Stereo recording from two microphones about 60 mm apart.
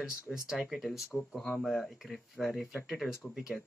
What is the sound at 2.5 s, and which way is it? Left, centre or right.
Speech, centre.